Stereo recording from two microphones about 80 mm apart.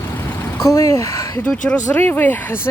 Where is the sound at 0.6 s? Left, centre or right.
Left.